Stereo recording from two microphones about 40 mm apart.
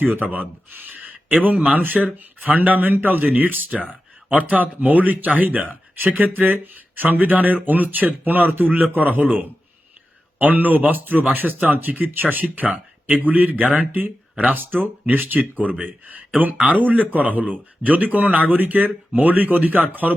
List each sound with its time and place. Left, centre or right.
0.0 s speech: right
0.3 s speech: right
10.3 s speech: right
14.5 s speech: right